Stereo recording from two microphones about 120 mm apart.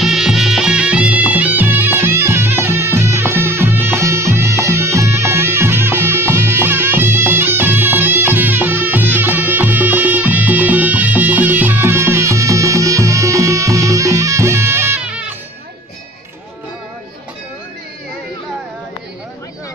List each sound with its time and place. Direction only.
0.0 s music: 5° right (ahead or behind); by 15.0 s 20° right (ahead or behind)
15.0 s music: 10° right (ahead or behind)